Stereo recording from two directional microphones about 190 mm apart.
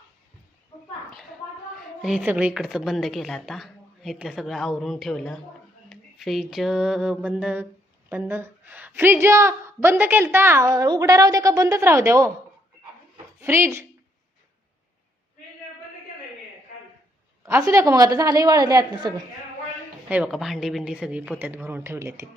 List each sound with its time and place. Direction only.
2.0 s a woman's voice: 5° right (ahead or behind)
13.4 s a woman's voice: 15° right (ahead or behind)
17.4 s a woman's voice: 15° right (ahead or behind)
20.1 s a woman's voice: 5° right (ahead or behind)